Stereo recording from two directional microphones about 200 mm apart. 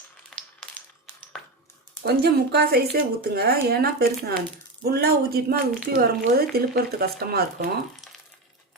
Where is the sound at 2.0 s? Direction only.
55° right (ahead or behind).